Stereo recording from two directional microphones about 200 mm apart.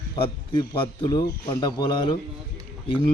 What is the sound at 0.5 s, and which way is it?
Speech, 25° left (ahead or behind).